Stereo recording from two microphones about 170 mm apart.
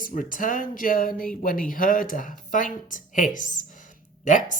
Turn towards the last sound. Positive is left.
turn(degrees=50)  # may be behind; listen again after turning